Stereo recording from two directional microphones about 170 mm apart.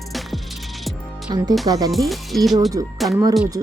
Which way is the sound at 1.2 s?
25° right (ahead or behind).